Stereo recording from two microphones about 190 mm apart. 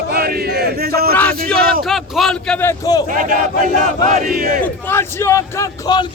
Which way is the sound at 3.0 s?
45° right (ahead or behind).